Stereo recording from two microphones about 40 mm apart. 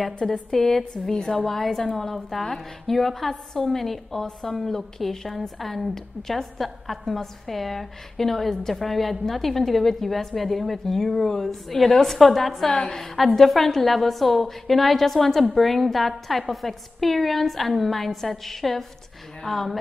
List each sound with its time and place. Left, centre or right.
0.2 s a woman's voice: centre
1.5 s a woman's voice: centre
12.6 s a woman's voice: centre
13.0 s a woman's voice: centre